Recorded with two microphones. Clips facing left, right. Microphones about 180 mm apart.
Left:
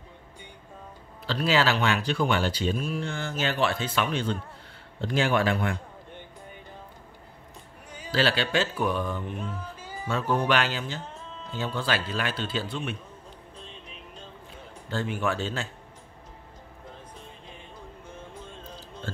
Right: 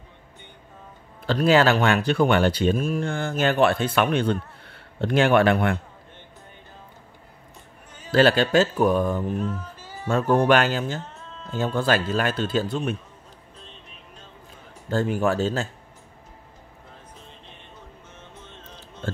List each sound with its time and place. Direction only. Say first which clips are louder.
1.2 s speech: right 6 dB; 50° right (ahead or behind)
8.1 s a man's voice: right 7 dB; 50° right (ahead or behind)
14.9 s speech: right 6 dB; 40° right (ahead or behind)